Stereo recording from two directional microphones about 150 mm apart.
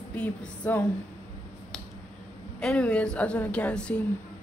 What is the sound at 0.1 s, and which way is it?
Music, 10° left (ahead or behind).